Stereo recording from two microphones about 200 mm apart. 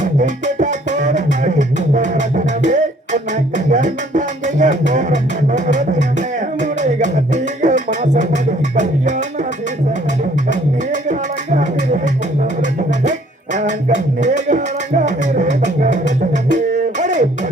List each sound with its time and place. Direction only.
0.0 s music: 40° right (ahead or behind)
11.1 s a sound: 40° right (ahead or behind)
13.1 s music: 35° right (ahead or behind)